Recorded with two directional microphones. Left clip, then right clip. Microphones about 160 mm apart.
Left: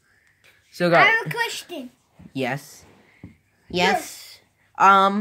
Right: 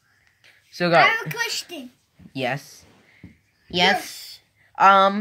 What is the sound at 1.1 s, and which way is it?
Speech, 40° left (ahead or behind).